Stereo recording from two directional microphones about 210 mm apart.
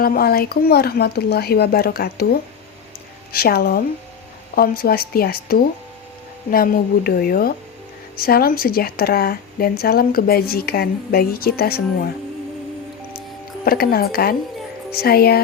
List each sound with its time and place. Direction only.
0.0 s speech: 45° left (ahead or behind)
13.7 s speech: 45° left (ahead or behind)